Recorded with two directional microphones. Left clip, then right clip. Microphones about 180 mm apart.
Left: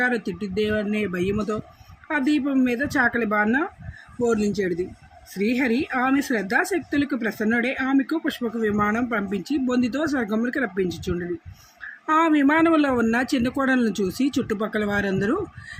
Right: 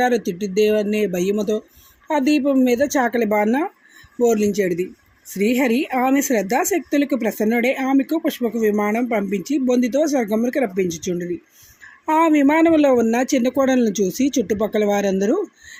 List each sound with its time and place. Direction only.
0.0 s a woman's voice: 15° right (ahead or behind)